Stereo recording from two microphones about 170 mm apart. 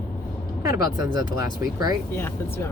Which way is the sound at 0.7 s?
20° right (ahead or behind).